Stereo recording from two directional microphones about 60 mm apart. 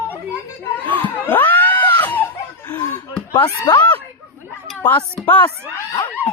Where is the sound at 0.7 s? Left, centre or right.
Left.